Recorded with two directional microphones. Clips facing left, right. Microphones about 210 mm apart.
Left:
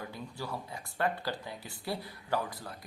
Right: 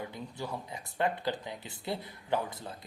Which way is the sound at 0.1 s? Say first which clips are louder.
Right 1 dB; 20° right (ahead or behind).